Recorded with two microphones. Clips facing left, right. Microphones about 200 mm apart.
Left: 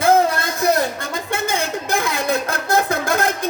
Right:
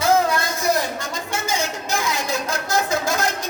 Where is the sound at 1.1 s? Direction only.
55° left (ahead or behind).